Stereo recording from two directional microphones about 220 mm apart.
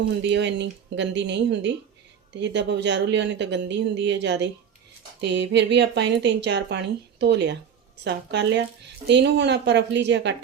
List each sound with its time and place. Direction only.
0.1 s speech: 50° right (ahead or behind)